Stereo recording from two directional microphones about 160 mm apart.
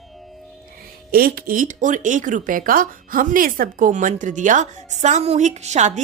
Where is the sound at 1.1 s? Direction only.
65° right (ahead or behind).